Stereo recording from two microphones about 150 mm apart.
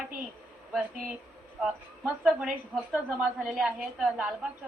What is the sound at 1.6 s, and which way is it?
A woman's voice, 5° right (ahead or behind).